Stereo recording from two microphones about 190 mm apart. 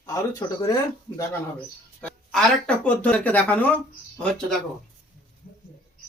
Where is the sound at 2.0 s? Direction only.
5° left (ahead or behind).